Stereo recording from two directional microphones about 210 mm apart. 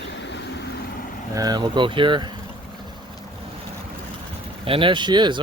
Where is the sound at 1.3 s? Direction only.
20° right (ahead or behind).